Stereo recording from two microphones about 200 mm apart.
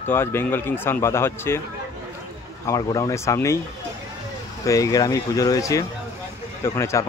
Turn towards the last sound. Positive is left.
turn(degrees=15)  # may be behind; listen again after turning